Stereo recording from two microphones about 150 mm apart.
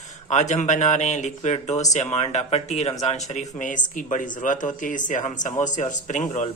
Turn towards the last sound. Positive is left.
turn(degrees=55)  # may be behind; listen again after turning